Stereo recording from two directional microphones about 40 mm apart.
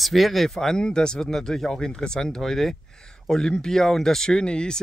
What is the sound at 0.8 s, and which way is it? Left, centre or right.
Speech, left.